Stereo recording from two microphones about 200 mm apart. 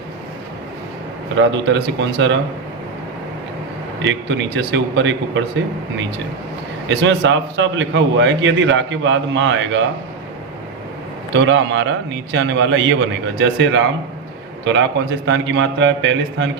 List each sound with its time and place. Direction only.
1.4 s a man's voice: 65° right (ahead or behind)
4.0 s a man's voice: 65° right (ahead or behind)
6.8 s a man's voice: 65° right (ahead or behind)
11.3 s a man's voice: 70° right (ahead or behind)